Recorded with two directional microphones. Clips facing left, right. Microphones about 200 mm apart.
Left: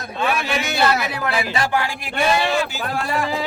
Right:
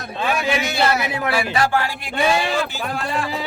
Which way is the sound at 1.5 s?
15° left (ahead or behind).